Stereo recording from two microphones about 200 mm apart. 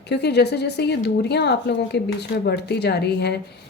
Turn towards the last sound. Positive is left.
turn(degrees=55)  # may be behind; listen again after turning